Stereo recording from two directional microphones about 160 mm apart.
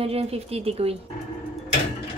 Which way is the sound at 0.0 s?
40° right (ahead or behind).